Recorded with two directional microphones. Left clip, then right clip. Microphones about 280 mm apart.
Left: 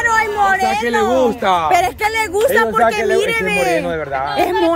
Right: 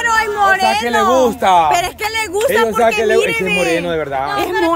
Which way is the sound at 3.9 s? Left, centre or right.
Right.